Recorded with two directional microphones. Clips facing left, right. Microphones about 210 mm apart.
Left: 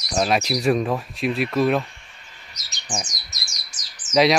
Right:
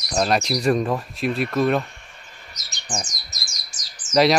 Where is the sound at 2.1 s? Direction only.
50° right (ahead or behind).